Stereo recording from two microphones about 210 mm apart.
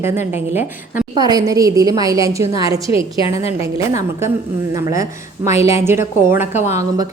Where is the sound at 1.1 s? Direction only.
20° right (ahead or behind).